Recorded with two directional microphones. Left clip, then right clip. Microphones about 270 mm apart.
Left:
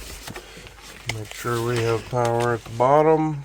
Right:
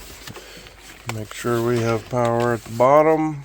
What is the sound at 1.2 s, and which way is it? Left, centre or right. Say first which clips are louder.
Speech: right 5 dB; right.